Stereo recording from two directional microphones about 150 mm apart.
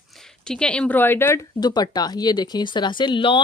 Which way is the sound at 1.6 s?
30° left (ahead or behind).